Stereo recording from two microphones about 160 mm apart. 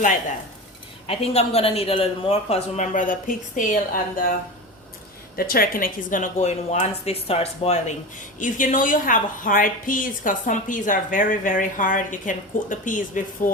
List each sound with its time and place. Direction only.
1.0 s speech: 40° left (ahead or behind)
5.4 s speech: 65° left (ahead or behind); by 7.9 s 40° left (ahead or behind)
8.4 s a woman's voice: 55° left (ahead or behind)